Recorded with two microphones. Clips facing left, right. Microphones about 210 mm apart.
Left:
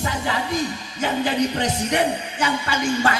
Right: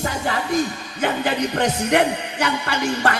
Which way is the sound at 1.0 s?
60° right (ahead or behind).